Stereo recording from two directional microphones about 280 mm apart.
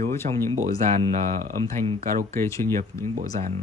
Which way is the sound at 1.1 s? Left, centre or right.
Right.